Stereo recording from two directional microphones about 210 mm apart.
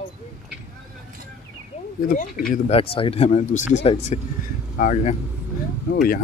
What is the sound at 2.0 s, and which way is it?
Speech, 40° left (ahead or behind).